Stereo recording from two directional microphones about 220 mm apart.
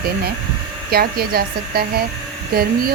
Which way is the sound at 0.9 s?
45° right (ahead or behind).